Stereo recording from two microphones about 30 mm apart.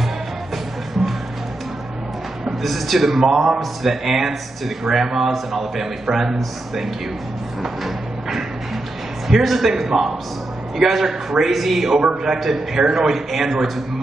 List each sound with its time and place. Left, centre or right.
2.6 s a man's voice: centre
7.6 s music: centre
9.3 s a man's voice: centre